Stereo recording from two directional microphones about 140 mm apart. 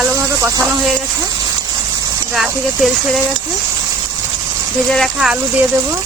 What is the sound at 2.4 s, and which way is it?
Speech, centre (ahead or behind).